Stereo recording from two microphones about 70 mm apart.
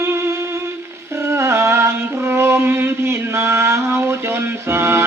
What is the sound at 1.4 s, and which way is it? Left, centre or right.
Music, right.